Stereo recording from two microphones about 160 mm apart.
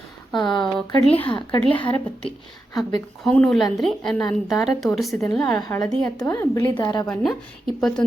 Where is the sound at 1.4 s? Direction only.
30° left (ahead or behind).